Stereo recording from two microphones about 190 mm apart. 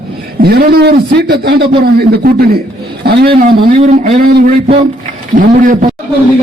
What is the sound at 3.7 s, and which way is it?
A man's voice, 35° right (ahead or behind).